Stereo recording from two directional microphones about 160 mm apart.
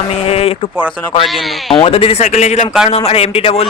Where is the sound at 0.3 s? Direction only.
40° left (ahead or behind).